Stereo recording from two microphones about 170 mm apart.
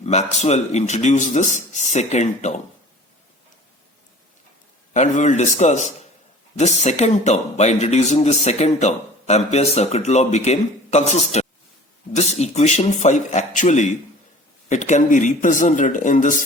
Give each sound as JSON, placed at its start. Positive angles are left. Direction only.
{"t": 0.0, "sound": "speech", "side_deg": 40}
{"t": 4.9, "sound": "speech", "side_deg": 45}